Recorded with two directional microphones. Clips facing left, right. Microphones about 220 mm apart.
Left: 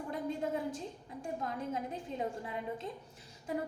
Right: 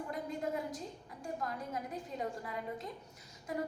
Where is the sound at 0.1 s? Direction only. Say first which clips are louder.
Left 4 dB; 30° left (ahead or behind).